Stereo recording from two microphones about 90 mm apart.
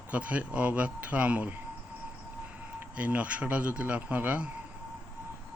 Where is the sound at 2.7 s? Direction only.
15° right (ahead or behind).